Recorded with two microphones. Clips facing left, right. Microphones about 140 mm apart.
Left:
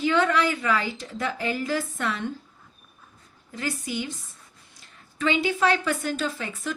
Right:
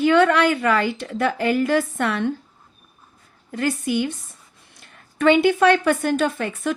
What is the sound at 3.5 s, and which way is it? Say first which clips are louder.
Speech: right 8 dB; 60° right (ahead or behind).